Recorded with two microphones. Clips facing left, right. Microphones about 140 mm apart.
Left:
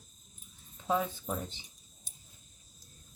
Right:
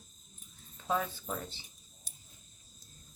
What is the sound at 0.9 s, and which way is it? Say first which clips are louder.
Speech: left 2 dB; 15° left (ahead or behind).